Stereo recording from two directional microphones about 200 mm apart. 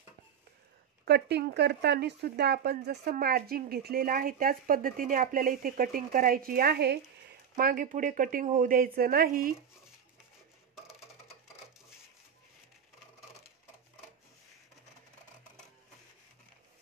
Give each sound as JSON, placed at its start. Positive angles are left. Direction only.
{"t": 1.0, "sound": "speech", "side_deg": -55}